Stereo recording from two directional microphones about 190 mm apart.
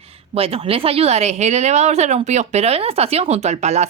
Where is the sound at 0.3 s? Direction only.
30° right (ahead or behind).